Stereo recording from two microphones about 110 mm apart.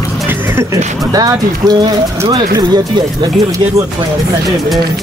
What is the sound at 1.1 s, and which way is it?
Speech, 35° right (ahead or behind).